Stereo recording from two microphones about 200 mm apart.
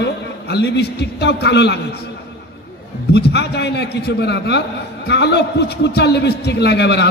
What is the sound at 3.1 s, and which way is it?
A man's voice, 55° left (ahead or behind).